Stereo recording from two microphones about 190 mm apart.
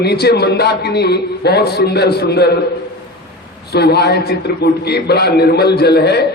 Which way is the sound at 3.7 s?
60° left (ahead or behind).